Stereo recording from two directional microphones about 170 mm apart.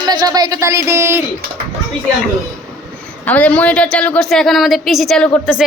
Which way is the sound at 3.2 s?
10° left (ahead or behind).